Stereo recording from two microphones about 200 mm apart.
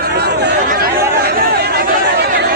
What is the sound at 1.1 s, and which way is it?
Chatter, 50° right (ahead or behind).